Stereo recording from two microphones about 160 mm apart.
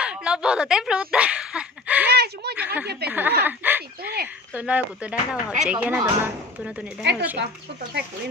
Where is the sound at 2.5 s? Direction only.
10° right (ahead or behind).